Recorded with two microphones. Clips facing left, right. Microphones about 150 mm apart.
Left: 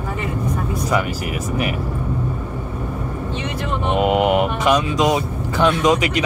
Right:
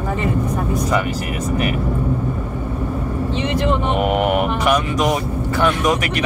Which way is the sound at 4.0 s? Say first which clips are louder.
Left 5 dB; 15° left (ahead or behind).